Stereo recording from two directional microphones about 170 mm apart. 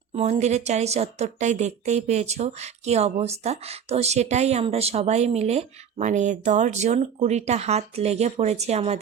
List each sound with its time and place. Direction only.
0.1 s a woman's voice: 40° right (ahead or behind)